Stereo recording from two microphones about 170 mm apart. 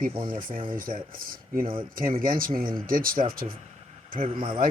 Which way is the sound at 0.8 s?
55° right (ahead or behind).